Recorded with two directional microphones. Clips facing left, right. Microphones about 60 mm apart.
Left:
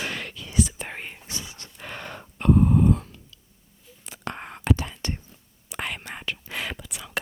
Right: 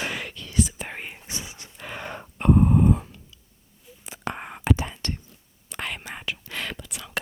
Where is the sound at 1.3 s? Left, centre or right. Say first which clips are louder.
Right 1 dB; right.